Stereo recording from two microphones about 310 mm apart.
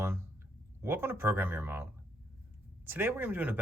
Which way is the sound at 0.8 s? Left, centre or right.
Centre.